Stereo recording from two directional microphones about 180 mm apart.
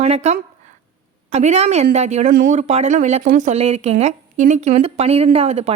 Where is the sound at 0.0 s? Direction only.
40° right (ahead or behind).